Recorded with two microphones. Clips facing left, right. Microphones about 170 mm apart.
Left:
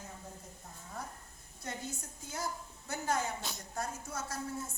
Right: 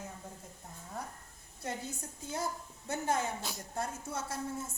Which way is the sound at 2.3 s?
25° right (ahead or behind).